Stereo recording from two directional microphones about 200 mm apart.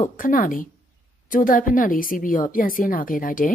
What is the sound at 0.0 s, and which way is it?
A woman's voice, 45° left (ahead or behind).